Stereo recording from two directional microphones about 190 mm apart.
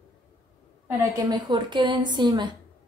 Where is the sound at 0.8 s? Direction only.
20° right (ahead or behind).